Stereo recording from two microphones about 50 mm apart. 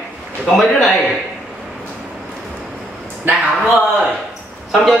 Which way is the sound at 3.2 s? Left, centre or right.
Right.